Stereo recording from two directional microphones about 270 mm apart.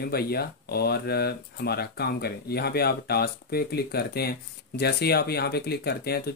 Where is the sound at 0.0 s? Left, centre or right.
Left.